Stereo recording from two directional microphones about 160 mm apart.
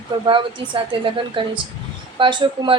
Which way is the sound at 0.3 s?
30° right (ahead or behind).